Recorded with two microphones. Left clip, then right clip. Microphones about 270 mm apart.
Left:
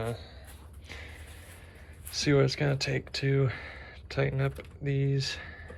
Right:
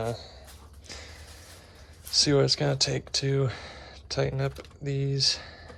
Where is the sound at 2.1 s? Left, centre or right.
Centre.